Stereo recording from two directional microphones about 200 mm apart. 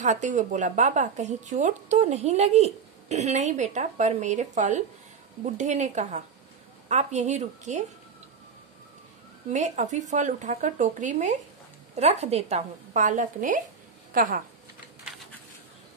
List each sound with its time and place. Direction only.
0.0 s speech: 35° right (ahead or behind)
9.5 s speech: 35° right (ahead or behind)